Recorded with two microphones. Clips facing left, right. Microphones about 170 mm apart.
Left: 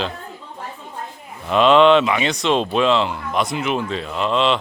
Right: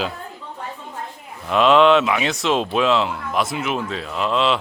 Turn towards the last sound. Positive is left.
turn(degrees=0)  # may be behind; listen again after turning